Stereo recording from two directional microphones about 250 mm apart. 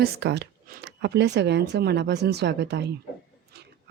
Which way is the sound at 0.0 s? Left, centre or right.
Right.